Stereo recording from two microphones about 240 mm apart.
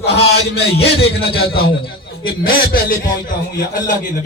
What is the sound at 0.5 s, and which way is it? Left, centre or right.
Speech, left.